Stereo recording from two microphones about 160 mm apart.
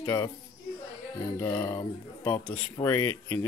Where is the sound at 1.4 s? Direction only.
20° left (ahead or behind).